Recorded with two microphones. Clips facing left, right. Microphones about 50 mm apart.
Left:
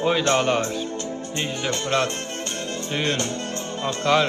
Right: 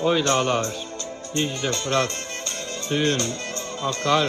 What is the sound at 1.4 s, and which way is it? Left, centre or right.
Speech, left.